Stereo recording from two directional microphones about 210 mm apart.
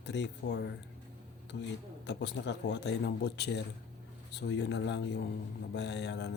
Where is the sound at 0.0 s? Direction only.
55° left (ahead or behind).